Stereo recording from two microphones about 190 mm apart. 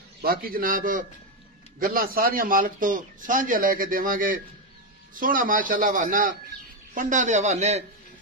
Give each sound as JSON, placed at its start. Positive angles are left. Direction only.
{"t": 0.2, "sound": "a man's voice", "side_deg": -50}